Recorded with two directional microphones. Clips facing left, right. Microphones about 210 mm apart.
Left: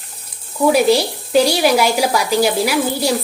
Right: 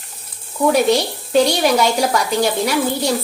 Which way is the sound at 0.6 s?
5° left (ahead or behind).